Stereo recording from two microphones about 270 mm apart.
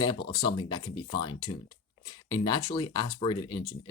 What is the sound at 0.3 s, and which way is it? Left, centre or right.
Speech, centre.